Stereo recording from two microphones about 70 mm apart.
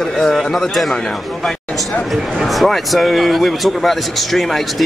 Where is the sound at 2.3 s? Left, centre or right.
Centre.